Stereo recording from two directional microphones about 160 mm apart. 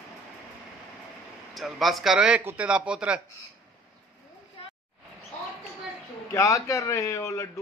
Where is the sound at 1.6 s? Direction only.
Centre (ahead or behind).